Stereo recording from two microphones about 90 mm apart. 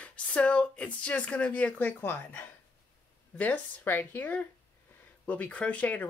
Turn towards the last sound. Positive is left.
turn(degrees=20)  # may be behind; listen again after turning